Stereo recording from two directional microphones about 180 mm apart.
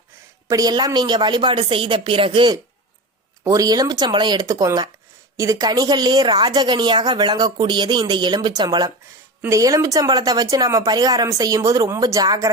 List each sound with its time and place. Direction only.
0.4 s a woman's voice: 20° right (ahead or behind)